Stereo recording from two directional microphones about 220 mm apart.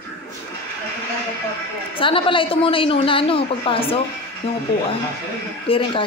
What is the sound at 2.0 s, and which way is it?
A woman's voice, 25° left (ahead or behind).